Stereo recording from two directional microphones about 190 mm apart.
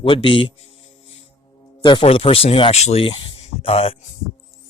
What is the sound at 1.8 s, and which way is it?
Speech, 30° left (ahead or behind).